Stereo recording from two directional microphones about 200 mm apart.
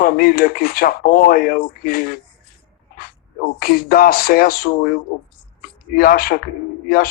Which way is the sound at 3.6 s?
45° left (ahead or behind).